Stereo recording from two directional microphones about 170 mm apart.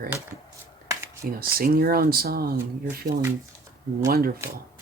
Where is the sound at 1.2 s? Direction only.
60° right (ahead or behind).